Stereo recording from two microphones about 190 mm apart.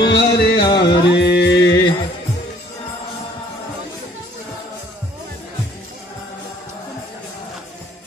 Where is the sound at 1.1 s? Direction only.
60° left (ahead or behind).